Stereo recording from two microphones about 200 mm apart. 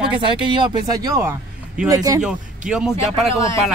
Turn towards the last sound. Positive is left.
turn(degrees=15)  # may be behind; listen again after turning